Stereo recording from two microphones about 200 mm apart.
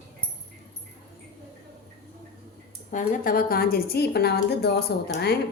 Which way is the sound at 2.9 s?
40° left (ahead or behind).